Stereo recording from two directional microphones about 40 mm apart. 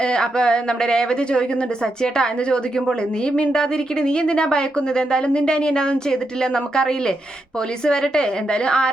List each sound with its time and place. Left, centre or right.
0.0 s speech: left